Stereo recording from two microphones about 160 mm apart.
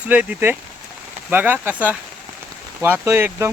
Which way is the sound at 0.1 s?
10° right (ahead or behind).